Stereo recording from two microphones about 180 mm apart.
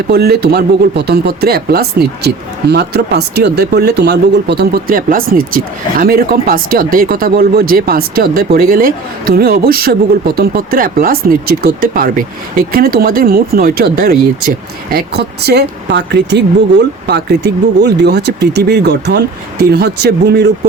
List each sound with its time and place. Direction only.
0.1 s speech: 60° right (ahead or behind)